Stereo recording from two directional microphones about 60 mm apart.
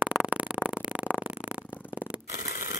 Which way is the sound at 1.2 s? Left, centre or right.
Right.